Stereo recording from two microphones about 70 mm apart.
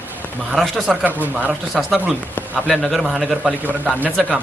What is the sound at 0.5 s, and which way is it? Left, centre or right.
A man's voice, centre.